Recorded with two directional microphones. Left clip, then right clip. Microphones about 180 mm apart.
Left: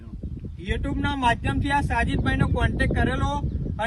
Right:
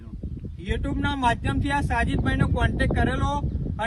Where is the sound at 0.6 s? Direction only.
15° right (ahead or behind).